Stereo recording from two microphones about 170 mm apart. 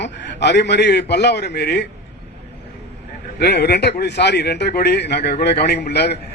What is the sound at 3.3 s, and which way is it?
A man's voice, 75° left (ahead or behind).